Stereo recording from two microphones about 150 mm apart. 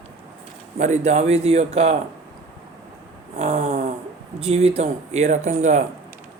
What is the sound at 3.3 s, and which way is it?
Snoring, 45° right (ahead or behind).